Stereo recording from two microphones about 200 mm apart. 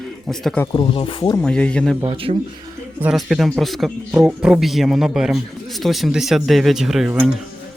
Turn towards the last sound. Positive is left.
turn(degrees=0)  # may be behind; listen again after turning